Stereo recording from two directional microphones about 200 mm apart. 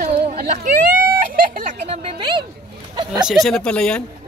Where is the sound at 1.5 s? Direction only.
35° right (ahead or behind).